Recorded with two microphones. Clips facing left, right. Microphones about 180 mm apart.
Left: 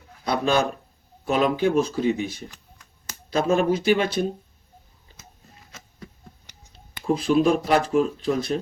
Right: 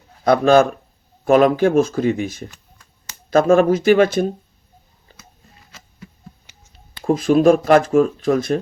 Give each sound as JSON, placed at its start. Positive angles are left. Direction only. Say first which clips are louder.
{"t": 0.3, "sound": "speech", "louder": "right 9 dB", "side_deg": -50}
{"t": 7.1, "sound": "speech", "louder": "right 6 dB", "side_deg": -45}